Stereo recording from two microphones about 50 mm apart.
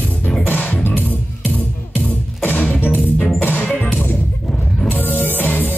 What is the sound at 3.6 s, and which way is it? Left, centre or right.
Music, left.